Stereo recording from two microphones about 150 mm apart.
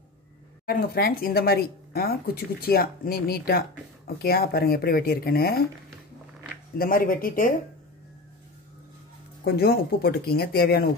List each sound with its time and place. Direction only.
0.7 s speech: 90° left
6.8 s speech: 75° left (ahead or behind)
9.4 s speech: 90° left